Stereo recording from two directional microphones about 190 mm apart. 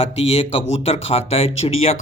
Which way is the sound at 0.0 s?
30° left (ahead or behind).